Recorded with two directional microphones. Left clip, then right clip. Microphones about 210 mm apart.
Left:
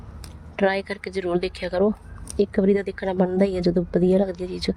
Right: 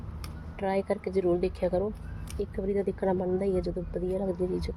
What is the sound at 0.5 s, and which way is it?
A woman's voice, 45° left (ahead or behind).